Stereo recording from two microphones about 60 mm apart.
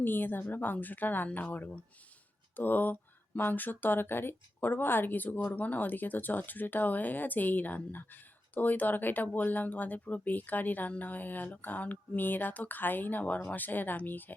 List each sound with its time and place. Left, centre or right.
0.0 s speech: left